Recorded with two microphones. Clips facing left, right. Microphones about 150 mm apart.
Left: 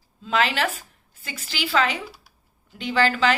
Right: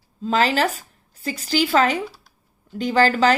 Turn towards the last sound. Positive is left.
turn(degrees=-40)  # may be behind; listen again after turning